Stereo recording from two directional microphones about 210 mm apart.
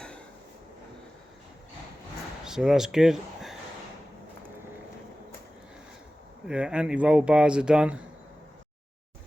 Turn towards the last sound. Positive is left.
turn(degrees=-5)  # may be behind; listen again after turning